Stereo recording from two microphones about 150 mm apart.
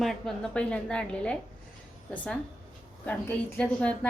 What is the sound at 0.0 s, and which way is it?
A woman's voice, centre (ahead or behind).